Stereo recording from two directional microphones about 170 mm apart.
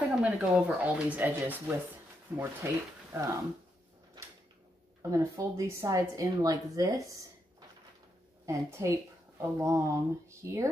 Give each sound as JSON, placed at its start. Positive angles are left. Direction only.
{"t": 0.2, "sound": "speech", "side_deg": -10}
{"t": 5.1, "sound": "speech", "side_deg": -20}
{"t": 8.5, "sound": "speech", "side_deg": -15}